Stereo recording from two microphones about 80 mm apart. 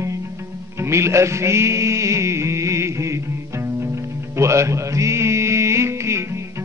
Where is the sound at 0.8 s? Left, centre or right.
Right.